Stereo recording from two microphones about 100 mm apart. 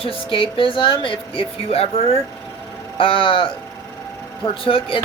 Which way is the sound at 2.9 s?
60° left (ahead or behind).